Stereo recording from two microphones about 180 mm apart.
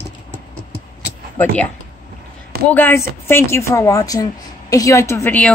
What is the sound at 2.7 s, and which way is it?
A woman's voice, 10° left (ahead or behind).